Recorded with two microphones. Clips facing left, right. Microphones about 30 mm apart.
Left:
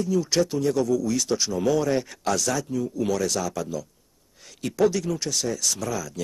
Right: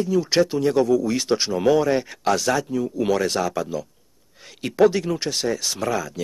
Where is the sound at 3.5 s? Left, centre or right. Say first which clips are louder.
Right 4 dB; right.